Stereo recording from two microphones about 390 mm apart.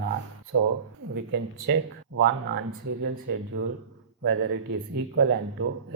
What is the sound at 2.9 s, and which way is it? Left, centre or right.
Speech, right.